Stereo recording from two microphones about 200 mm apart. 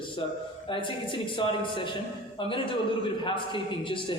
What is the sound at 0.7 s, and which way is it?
A man's voice, 25° left (ahead or behind).